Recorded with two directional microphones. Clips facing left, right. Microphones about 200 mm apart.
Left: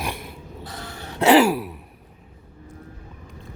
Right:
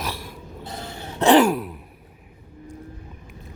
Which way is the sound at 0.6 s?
25° right (ahead or behind).